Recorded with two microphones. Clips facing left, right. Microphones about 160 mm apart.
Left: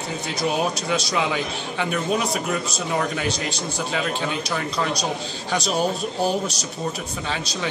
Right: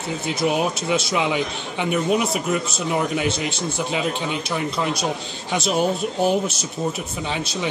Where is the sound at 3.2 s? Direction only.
15° right (ahead or behind).